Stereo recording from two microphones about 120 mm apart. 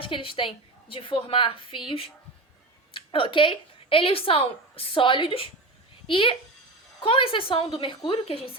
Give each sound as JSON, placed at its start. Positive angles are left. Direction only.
{"t": 0.0, "sound": "a woman's voice", "side_deg": 45}
{"t": 2.9, "sound": "a woman's voice", "side_deg": 45}